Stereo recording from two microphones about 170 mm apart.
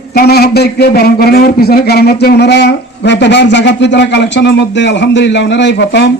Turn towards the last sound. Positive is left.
turn(degrees=90)